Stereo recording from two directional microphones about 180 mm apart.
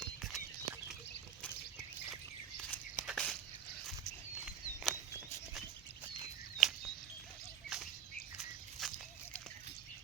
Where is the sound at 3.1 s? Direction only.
Centre (ahead or behind).